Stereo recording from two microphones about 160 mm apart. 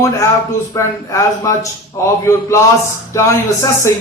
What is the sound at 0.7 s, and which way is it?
Speech, 20° left (ahead or behind).